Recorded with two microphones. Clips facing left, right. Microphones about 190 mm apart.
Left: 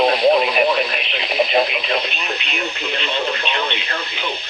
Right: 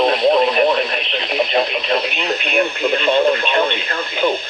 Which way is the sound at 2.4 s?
55° right (ahead or behind).